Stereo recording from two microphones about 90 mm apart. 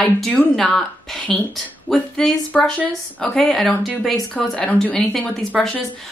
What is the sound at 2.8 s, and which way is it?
Speech, 15° left (ahead or behind).